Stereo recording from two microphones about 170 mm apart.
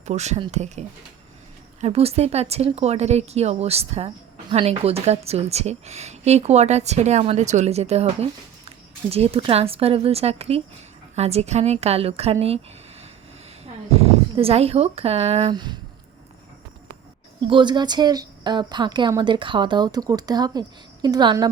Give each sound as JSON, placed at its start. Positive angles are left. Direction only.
{"t": 0.0, "sound": "speech", "side_deg": -40}
{"t": 13.9, "sound": "speech", "side_deg": -35}
{"t": 17.4, "sound": "speech", "side_deg": -25}